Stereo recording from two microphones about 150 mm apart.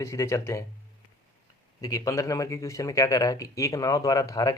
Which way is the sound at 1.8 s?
20° left (ahead or behind).